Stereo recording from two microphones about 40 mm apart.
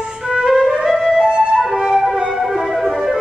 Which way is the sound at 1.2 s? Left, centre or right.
Right.